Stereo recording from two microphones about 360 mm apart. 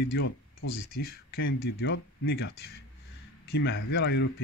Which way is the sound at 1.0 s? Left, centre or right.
Left.